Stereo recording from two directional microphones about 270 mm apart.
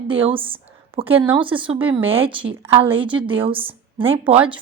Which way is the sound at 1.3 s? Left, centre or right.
Centre.